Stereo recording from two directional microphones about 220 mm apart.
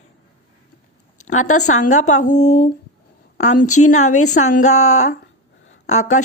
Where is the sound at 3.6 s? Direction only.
90° left.